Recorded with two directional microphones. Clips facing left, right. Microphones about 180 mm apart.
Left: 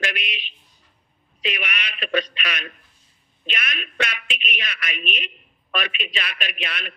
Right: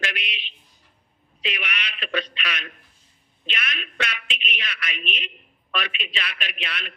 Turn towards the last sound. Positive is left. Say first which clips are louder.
# left 2 dB
turn(degrees=45)  # may be behind; listen again after turning